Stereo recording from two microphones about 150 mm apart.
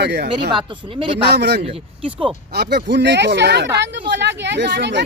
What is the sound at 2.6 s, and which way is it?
Speech, 90° right.